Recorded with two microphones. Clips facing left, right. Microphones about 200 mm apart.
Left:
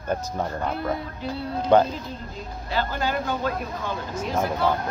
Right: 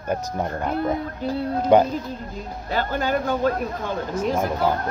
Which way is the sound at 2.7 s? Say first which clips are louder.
Right 3 dB; 50° right (ahead or behind).